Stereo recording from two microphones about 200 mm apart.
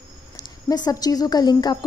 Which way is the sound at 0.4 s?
20° left (ahead or behind).